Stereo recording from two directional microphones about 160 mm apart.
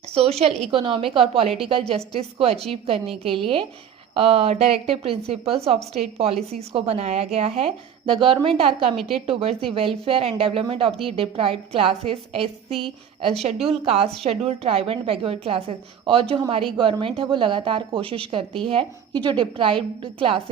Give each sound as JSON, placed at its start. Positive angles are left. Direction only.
{"t": 0.1, "sound": "speech", "side_deg": -40}
{"t": 9.0, "sound": "a woman's voice", "side_deg": 0}
{"t": 9.2, "sound": "speech", "side_deg": -35}
{"t": 13.7, "sound": "speech", "side_deg": -35}